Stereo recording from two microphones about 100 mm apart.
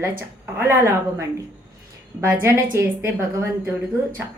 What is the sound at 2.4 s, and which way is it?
A woman's voice, 25° right (ahead or behind).